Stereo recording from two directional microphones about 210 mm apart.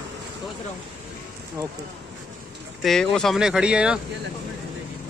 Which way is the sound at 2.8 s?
Centre (ahead or behind).